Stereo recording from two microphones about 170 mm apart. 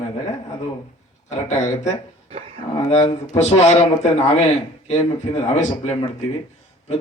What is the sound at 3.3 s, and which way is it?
Speech, 40° left (ahead or behind).